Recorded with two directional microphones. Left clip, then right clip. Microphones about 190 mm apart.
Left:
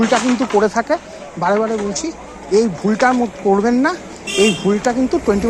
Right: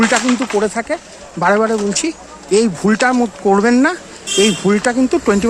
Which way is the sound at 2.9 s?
45° right (ahead or behind).